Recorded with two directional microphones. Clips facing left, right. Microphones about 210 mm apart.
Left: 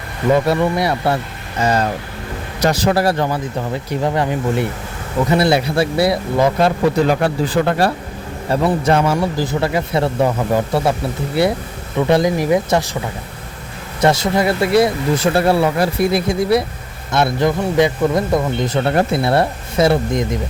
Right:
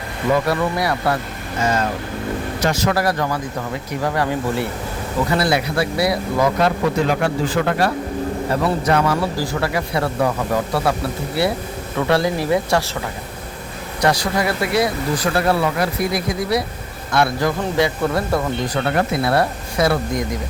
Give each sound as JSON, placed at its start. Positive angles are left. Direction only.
{"t": 0.3, "sound": "a man's voice", "side_deg": 25}
{"t": 2.6, "sound": "a man's voice", "side_deg": 35}
{"t": 14.0, "sound": "a man's voice", "side_deg": 25}